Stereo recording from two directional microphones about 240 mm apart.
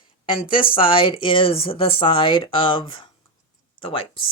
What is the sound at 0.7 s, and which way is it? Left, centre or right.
Speech, left.